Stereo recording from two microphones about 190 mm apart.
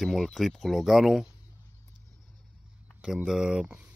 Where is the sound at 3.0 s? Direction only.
Centre (ahead or behind).